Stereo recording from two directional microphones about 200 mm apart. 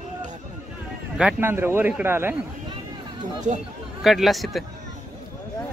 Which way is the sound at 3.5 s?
40° right (ahead or behind).